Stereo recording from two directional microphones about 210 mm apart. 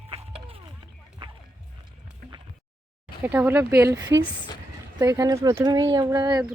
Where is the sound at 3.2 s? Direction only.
10° right (ahead or behind).